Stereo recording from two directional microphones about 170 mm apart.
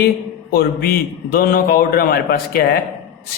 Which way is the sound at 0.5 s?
65° left (ahead or behind).